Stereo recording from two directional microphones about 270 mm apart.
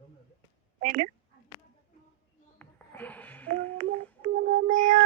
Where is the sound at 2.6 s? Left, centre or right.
Centre.